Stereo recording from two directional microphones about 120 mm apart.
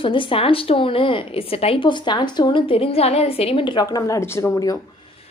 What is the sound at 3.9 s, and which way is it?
Speech, 30° left (ahead or behind).